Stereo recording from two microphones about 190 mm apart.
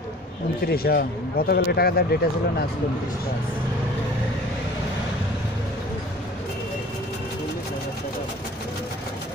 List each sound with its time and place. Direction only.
0.7 s speech: 55° left (ahead or behind)